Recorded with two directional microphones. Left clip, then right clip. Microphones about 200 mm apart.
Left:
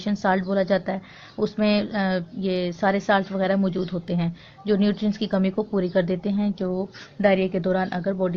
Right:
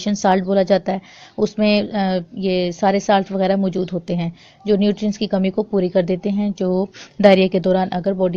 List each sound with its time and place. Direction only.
0.0 s a woman's voice: 35° right (ahead or behind)